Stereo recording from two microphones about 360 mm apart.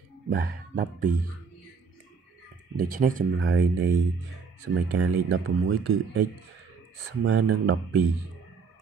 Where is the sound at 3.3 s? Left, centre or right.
Right.